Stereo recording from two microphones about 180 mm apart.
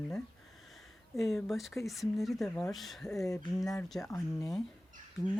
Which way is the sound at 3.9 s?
15° left (ahead or behind).